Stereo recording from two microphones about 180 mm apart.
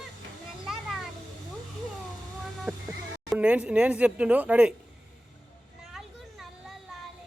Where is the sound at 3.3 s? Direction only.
5° right (ahead or behind).